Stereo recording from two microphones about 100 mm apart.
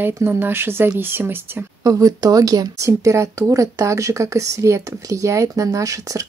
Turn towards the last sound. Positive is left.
turn(degrees=-30)  # may be behind; listen again after turning